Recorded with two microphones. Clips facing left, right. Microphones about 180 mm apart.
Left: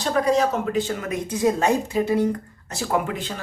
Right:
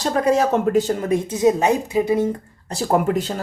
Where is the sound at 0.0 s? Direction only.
40° right (ahead or behind).